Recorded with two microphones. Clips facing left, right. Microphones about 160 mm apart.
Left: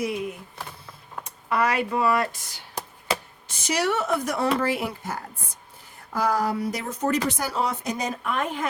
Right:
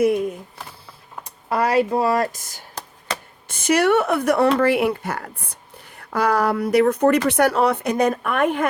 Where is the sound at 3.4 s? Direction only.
55° right (ahead or behind).